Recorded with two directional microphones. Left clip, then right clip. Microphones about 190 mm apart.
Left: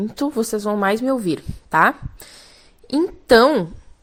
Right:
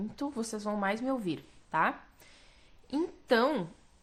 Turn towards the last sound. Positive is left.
turn(degrees=40)  # may be behind; listen again after turning